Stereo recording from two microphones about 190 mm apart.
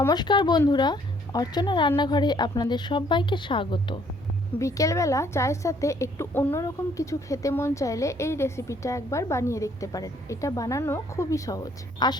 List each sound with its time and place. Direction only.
0.0 s a woman's voice: 20° left (ahead or behind)